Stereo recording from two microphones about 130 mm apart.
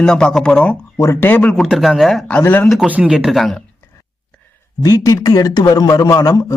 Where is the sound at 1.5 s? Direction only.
Centre (ahead or behind).